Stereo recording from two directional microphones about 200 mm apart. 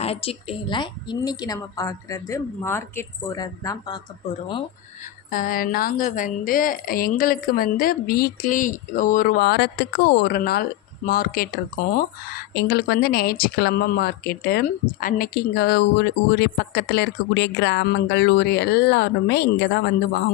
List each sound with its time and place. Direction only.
0.0 s a woman's voice: 30° left (ahead or behind)
5.3 s a woman's voice: 45° left (ahead or behind)